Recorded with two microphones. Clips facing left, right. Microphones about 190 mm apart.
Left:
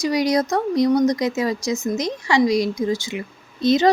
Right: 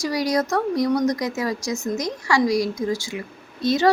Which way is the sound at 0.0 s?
20° left (ahead or behind).